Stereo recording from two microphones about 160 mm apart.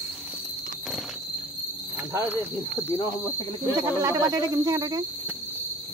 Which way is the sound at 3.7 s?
20° right (ahead or behind).